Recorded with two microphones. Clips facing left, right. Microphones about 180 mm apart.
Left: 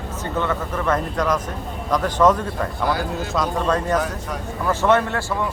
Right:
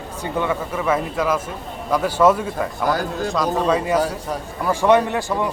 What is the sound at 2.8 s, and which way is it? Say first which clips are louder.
Speech: right 2 dB; 45° right (ahead or behind).